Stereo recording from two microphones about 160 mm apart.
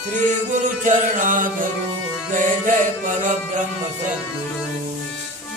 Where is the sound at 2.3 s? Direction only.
55° right (ahead or behind).